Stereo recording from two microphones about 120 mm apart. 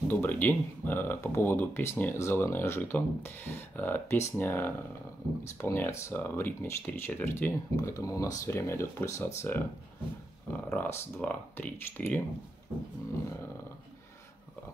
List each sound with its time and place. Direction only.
0.1 s speech: 15° left (ahead or behind)
7.7 s speech: 25° left (ahead or behind)